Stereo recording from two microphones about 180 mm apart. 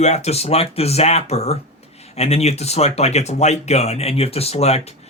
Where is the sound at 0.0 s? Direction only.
40° left (ahead or behind).